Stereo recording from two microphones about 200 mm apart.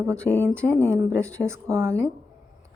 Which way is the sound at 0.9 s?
15° right (ahead or behind).